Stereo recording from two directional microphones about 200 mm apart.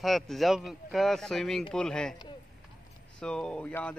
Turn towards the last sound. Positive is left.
turn(degrees=5)  # may be behind; listen again after turning